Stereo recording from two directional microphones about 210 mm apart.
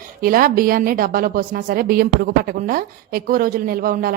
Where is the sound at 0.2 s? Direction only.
45° right (ahead or behind).